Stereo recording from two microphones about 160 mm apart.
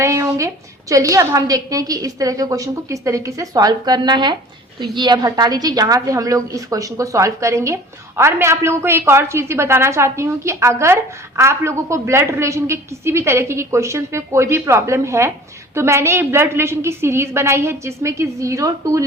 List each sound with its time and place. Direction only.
0.0 s a woman's voice: 20° right (ahead or behind)